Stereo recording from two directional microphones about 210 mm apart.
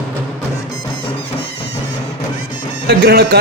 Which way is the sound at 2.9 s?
45° right (ahead or behind).